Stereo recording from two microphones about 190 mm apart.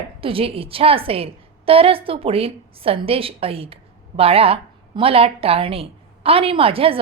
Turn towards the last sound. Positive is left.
turn(degrees=-30)  # may be behind; listen again after turning